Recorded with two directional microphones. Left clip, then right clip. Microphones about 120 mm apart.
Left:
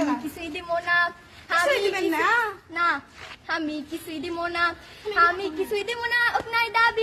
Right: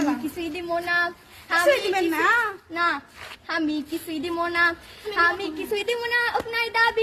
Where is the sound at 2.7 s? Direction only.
30° left (ahead or behind).